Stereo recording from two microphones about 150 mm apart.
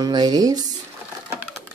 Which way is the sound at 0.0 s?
25° right (ahead or behind).